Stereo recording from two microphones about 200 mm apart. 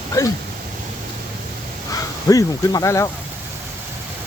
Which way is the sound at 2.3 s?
15° left (ahead or behind).